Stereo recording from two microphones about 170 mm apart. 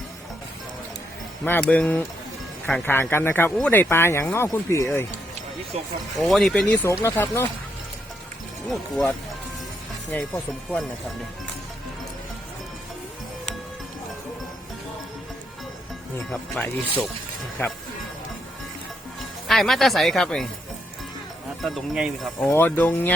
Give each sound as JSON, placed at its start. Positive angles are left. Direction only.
{"t": 1.5, "sound": "speech", "side_deg": 10}
{"t": 5.7, "sound": "speech", "side_deg": -40}
{"t": 6.1, "sound": "speech", "side_deg": 0}
{"t": 7.0, "sound": "speech", "side_deg": 15}
{"t": 10.1, "sound": "speech", "side_deg": 5}
{"t": 16.3, "sound": "speech", "side_deg": 10}
{"t": 19.5, "sound": "speech", "side_deg": 0}
{"t": 21.6, "sound": "speech", "side_deg": 0}
{"t": 22.4, "sound": "speech", "side_deg": 10}